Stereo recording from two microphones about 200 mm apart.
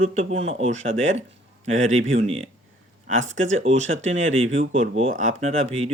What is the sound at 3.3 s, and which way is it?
Speech, 75° right (ahead or behind).